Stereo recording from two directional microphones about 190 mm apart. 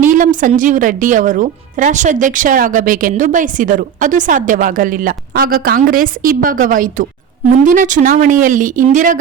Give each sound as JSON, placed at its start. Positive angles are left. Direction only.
{"t": 0.0, "sound": "a woman's voice", "side_deg": -45}